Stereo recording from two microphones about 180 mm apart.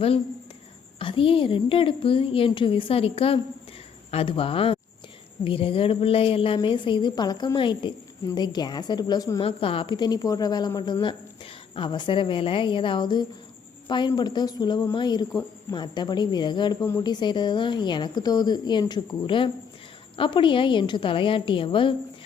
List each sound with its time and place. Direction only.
0.9 s speech: 30° left (ahead or behind)
9.4 s a woman's voice: 30° left (ahead or behind)